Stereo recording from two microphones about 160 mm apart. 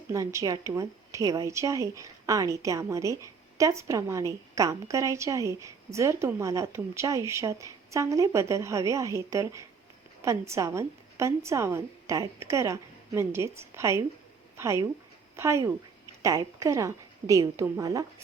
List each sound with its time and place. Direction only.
0.1 s a woman's voice: 20° right (ahead or behind)